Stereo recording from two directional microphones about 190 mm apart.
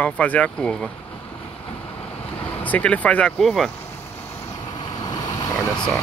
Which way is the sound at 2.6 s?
5° left (ahead or behind).